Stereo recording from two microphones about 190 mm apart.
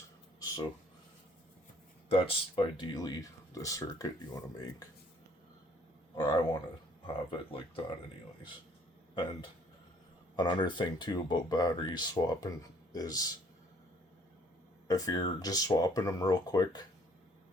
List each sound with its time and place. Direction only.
0.3 s a sound: 20° left (ahead or behind)
2.0 s speech: 30° left (ahead or behind)
6.1 s speech: 20° left (ahead or behind)
10.3 s speech: 25° left (ahead or behind)
14.8 s speech: 20° left (ahead or behind)